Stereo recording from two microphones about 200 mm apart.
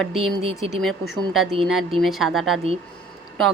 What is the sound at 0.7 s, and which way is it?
Speech, centre (ahead or behind).